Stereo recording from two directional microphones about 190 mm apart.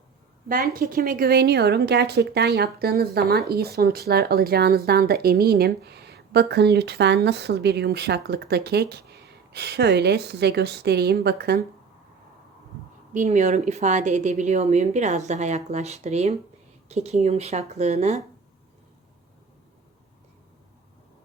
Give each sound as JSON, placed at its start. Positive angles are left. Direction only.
{"t": 0.4, "sound": "speech", "side_deg": -50}
{"t": 13.1, "sound": "a woman's voice", "side_deg": -40}